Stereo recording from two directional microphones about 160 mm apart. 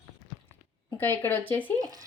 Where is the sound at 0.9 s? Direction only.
15° left (ahead or behind).